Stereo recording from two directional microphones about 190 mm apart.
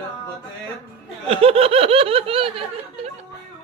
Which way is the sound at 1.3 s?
30° right (ahead or behind).